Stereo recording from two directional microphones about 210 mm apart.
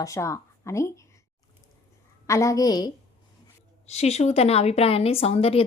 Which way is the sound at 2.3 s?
15° left (ahead or behind).